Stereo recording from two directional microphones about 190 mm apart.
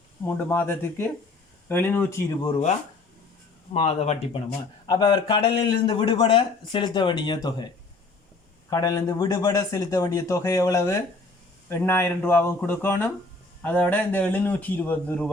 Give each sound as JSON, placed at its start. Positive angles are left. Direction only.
{"t": 0.3, "sound": "speech", "side_deg": 10}
{"t": 2.5, "sound": "speech", "side_deg": 35}
{"t": 8.7, "sound": "speech", "side_deg": 20}